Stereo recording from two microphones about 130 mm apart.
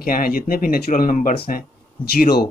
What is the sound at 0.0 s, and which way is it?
Speech, 90° left.